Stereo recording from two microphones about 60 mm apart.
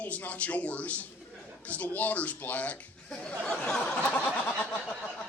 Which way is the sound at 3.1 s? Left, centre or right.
Centre.